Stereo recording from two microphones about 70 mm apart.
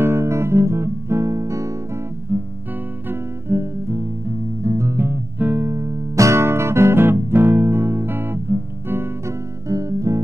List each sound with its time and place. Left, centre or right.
0.0 s music: right
2.3 s music: right
3.1 s guitar: right
4.6 s music: right
4.9 s music: right
5.7 s music: right
9.7 s guitar: right